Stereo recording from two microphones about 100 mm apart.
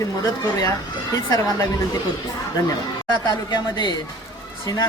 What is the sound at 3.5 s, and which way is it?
Speech, 50° left (ahead or behind).